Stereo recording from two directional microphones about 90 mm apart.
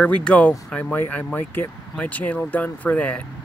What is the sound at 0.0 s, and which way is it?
Speech, 15° left (ahead or behind).